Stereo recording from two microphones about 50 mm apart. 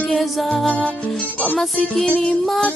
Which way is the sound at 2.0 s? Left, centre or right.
Left.